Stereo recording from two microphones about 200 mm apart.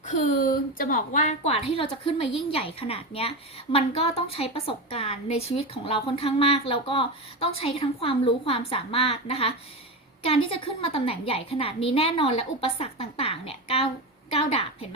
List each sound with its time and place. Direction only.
0.0 s a woman's voice: 40° left (ahead or behind)